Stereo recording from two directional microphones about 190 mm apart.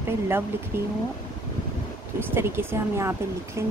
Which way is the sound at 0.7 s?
10° right (ahead or behind).